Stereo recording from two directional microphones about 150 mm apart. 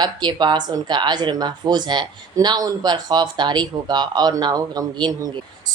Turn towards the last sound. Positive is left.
turn(degrees=-25)  # may be behind; listen again after turning